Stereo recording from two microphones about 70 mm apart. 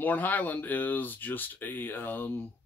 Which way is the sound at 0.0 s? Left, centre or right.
Left.